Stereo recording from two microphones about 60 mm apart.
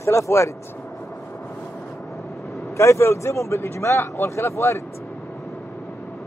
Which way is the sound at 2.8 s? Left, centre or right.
Left.